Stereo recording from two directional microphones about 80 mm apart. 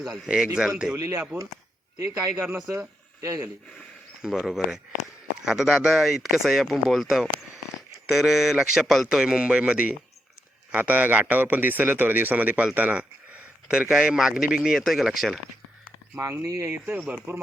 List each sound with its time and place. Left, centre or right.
0.0 s speech: centre
0.3 s a man's voice: centre
0.9 s a man's voice: right
2.3 s speech: right
4.2 s a man's voice: centre
16.4 s speech: right
16.7 s a man's voice: right